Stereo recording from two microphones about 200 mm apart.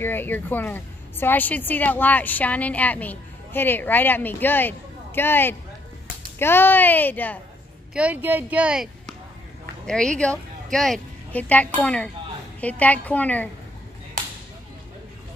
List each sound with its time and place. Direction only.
0.0 s a woman's voice: 10° left (ahead or behind)
7.9 s a woman's voice: 5° right (ahead or behind)